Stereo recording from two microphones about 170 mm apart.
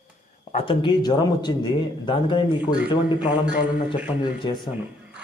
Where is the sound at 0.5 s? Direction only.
30° left (ahead or behind).